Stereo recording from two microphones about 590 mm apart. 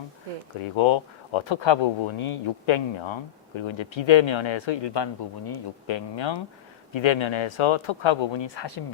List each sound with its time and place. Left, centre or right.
0.6 s speech: left